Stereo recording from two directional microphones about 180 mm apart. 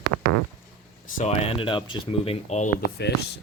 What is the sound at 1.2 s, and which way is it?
Speech, 35° left (ahead or behind).